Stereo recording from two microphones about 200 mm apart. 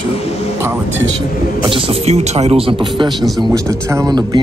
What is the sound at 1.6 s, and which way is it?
Speech, 25° right (ahead or behind).